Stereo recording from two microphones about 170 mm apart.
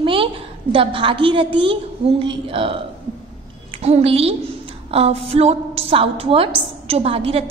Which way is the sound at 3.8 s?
40° right (ahead or behind).